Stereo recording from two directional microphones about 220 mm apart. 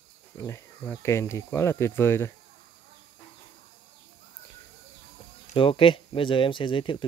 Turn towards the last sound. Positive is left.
turn(degrees=25)  # may be behind; listen again after turning